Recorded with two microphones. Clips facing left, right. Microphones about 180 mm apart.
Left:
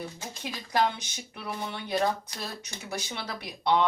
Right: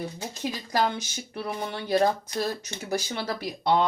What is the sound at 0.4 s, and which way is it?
Speech, 45° right (ahead or behind).